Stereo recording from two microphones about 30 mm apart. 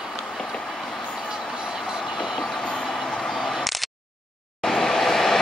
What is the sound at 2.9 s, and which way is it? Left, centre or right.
Vehicle, centre.